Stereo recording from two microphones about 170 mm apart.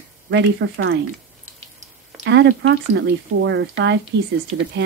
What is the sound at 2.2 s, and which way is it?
Speech, 90° right.